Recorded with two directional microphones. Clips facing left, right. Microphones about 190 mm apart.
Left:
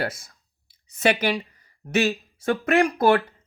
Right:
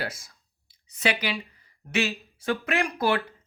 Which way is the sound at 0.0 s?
55° left (ahead or behind).